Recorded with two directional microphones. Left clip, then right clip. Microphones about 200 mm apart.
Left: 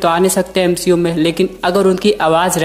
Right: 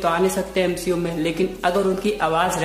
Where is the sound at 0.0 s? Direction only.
40° left (ahead or behind).